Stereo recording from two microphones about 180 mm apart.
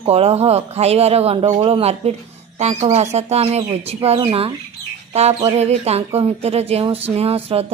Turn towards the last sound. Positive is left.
turn(degrees=-35)  # may be behind; listen again after turning